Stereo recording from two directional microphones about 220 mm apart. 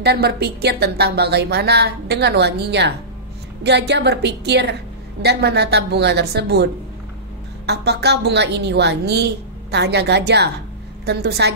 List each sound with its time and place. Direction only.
0.0 s speech: 45° right (ahead or behind)